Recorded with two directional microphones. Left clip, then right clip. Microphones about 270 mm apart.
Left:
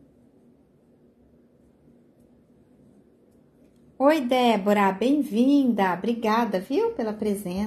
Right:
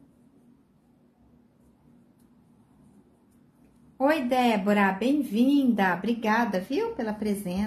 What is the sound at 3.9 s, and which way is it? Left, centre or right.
Speech, centre.